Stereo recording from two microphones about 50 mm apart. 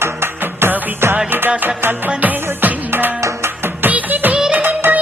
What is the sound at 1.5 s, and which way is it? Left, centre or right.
Music, right.